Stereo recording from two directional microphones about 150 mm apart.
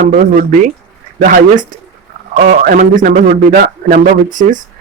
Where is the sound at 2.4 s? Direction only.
75° right (ahead or behind).